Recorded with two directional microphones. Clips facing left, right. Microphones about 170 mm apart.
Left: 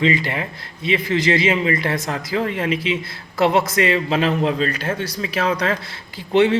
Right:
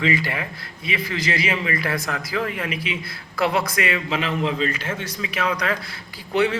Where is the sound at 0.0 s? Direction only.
25° left (ahead or behind).